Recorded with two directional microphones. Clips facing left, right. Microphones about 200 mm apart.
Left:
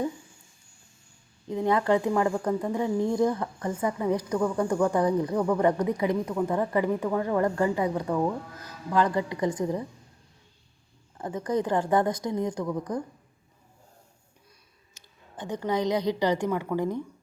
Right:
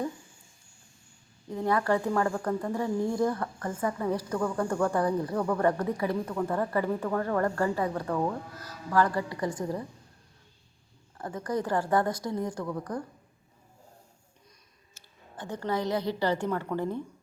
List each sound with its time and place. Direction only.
1.5 s speech: 20° left (ahead or behind)
11.2 s a woman's voice: 20° left (ahead or behind)
14.9 s a woman's voice: 15° left (ahead or behind)